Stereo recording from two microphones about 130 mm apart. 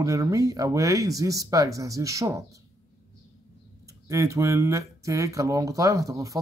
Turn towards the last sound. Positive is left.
turn(degrees=-25)  # may be behind; listen again after turning